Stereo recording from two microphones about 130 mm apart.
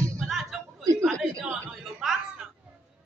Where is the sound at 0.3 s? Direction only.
Centre (ahead or behind).